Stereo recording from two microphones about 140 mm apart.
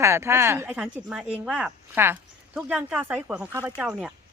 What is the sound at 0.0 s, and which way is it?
Speech, 20° right (ahead or behind).